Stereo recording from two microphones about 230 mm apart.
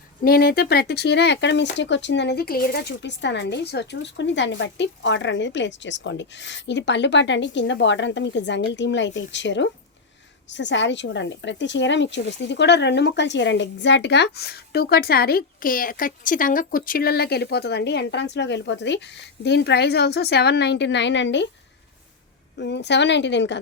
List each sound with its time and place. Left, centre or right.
0.3 s speech: left
22.5 s speech: left